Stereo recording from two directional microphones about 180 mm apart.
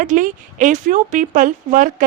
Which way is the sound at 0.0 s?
45° right (ahead or behind).